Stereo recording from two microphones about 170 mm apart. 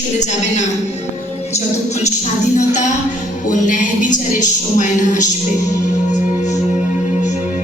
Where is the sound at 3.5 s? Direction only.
50° left (ahead or behind).